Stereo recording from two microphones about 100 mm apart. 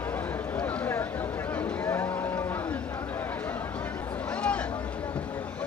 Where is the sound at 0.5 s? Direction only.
20° left (ahead or behind).